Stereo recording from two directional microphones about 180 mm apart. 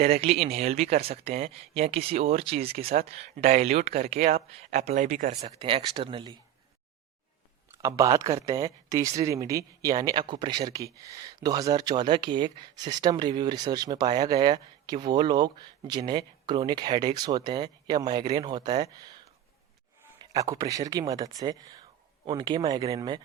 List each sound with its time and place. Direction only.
0.0 s speech: 35° right (ahead or behind)
5.5 s speech: 25° right (ahead or behind)
7.8 s speech: 15° right (ahead or behind)
20.3 s speech: 20° right (ahead or behind)